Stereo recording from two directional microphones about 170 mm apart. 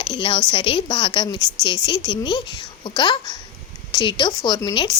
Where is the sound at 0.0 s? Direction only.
30° left (ahead or behind).